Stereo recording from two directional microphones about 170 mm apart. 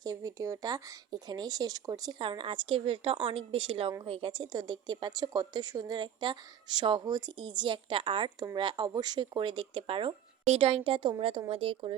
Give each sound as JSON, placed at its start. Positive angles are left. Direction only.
{"t": 0.0, "sound": "speech", "side_deg": -20}